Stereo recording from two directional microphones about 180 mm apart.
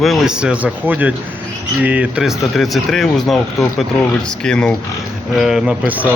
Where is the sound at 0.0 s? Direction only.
Centre (ahead or behind).